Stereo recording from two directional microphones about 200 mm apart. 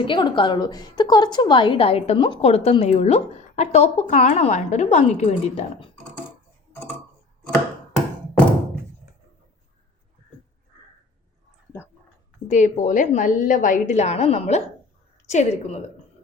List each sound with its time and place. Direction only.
0.0 s a woman's voice: 25° left (ahead or behind)
12.5 s a woman's voice: 35° left (ahead or behind)